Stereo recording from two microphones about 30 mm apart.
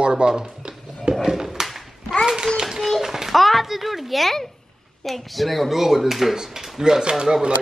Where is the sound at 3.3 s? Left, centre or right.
Centre.